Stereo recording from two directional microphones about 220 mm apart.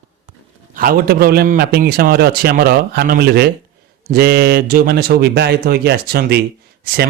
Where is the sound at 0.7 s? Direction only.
40° right (ahead or behind).